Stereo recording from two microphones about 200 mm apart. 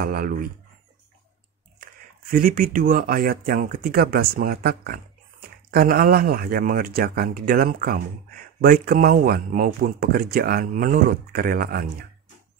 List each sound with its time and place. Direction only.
0.0 s speech: 45° right (ahead or behind)
1.8 s speech: 45° right (ahead or behind)